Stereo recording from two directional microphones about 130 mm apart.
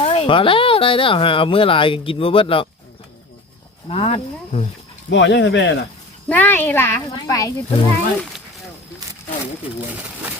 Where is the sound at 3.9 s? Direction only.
50° left (ahead or behind).